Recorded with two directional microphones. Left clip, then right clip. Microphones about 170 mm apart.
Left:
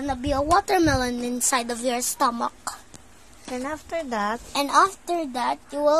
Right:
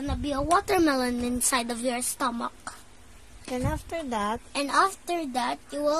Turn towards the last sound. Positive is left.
turn(degrees=-10)  # may be behind; listen again after turning